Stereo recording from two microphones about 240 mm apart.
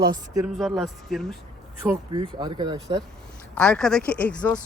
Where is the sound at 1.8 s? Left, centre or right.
Centre.